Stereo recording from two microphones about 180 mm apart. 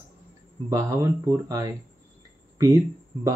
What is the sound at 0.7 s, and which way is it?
Speech, 20° right (ahead or behind).